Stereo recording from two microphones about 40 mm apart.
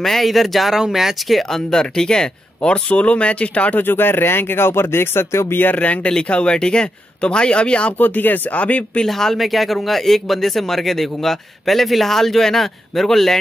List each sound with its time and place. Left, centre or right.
0.0 s speech: centre
0.7 s speech: centre
1.5 s speech: centre; by 3.8 s left
3.8 s speech: left
5.7 s speech: left
6.2 s speech: left
8.0 s speech: left
8.5 s speech: left
9.0 s speech: centre